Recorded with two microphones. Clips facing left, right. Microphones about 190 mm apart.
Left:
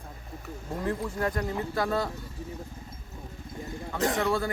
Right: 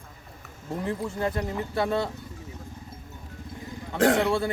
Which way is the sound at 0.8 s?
25° right (ahead or behind).